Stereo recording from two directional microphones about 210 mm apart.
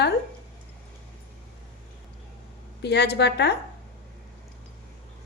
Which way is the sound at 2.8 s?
50° left (ahead or behind).